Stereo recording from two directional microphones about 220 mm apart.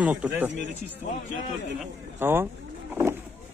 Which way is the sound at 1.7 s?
10° right (ahead or behind).